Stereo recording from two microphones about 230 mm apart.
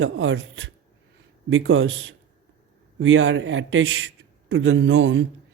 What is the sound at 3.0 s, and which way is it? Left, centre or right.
Speech, right.